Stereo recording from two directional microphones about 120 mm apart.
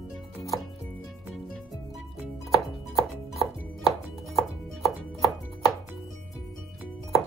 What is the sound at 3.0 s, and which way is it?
Music, centre (ahead or behind).